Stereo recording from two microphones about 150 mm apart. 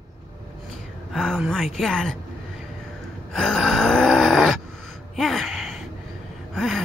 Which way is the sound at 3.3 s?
Centre (ahead or behind).